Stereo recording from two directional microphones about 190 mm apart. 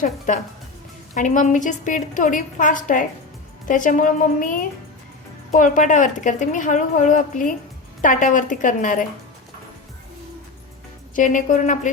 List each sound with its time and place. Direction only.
1.1 s a woman's voice: 40° left (ahead or behind)
11.1 s a woman's voice: 45° left (ahead or behind)